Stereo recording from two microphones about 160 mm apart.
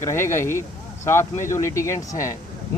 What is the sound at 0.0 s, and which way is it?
Speech, 15° left (ahead or behind).